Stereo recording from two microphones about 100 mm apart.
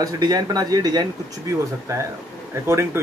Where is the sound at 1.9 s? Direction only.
30° right (ahead or behind).